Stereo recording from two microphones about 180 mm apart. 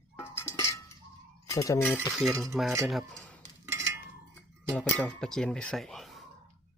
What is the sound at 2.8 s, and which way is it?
Speech, centre (ahead or behind).